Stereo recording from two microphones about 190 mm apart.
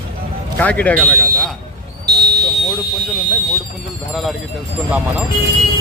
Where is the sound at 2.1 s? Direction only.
60° right (ahead or behind).